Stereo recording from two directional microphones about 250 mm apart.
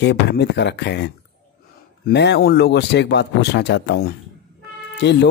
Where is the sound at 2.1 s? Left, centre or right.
Left.